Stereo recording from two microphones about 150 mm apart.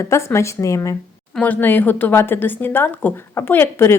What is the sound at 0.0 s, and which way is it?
Speech, 20° left (ahead or behind).